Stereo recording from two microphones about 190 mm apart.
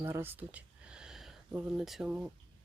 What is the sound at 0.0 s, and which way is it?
Speech, 10° right (ahead or behind).